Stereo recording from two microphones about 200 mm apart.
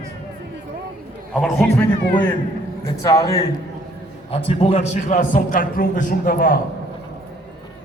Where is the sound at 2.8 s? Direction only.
15° left (ahead or behind).